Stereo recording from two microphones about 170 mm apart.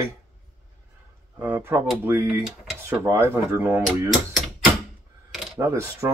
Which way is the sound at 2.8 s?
15° right (ahead or behind).